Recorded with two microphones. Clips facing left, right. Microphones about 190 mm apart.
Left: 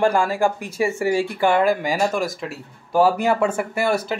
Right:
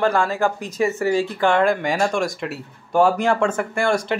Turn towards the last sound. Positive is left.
turn(degrees=5)  # may be behind; listen again after turning